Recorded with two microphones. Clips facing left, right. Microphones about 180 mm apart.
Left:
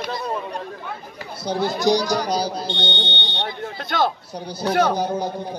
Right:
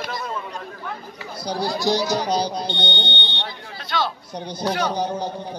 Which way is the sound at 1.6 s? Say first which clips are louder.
Left 3 dB; 20° left (ahead or behind).